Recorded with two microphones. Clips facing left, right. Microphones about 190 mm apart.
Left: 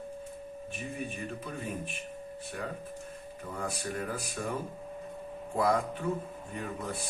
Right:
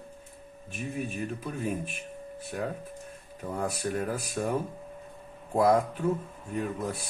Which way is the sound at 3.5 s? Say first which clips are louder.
Right 5 dB; 45° right (ahead or behind).